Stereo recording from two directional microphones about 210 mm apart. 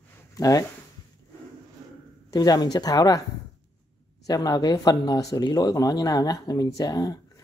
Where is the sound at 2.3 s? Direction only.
20° left (ahead or behind).